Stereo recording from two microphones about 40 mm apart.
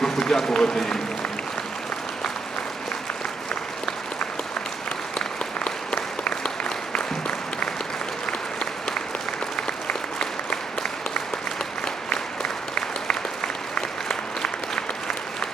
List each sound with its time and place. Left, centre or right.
0.0 s speech: centre
5.2 s applause: left
9.6 s applause: left
12.0 s applause: left